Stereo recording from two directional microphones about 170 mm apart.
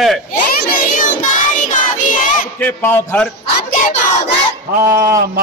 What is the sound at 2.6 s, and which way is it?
Speech, 10° left (ahead or behind).